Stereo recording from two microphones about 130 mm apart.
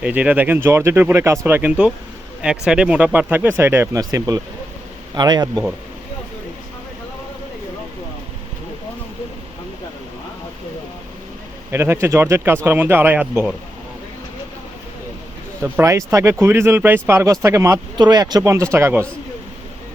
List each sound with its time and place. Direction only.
0.0 s a man's voice: 10° right (ahead or behind); by 5.6 s 30° right (ahead or behind)
11.7 s speech: 20° right (ahead or behind)
15.6 s speech: 20° right (ahead or behind)